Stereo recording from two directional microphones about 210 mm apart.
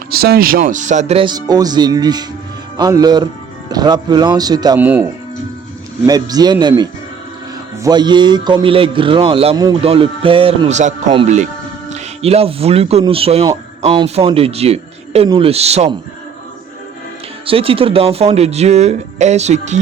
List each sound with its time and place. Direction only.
0.1 s a man's voice: 45° right (ahead or behind); by 4.8 s 20° right (ahead or behind)
4.8 s speech: 10° right (ahead or behind)
6.1 s a man's voice: 20° right (ahead or behind)
17.4 s speech: 25° right (ahead or behind)